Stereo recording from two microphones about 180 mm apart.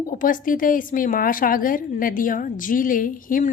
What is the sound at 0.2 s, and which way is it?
A woman's voice, 50° left (ahead or behind).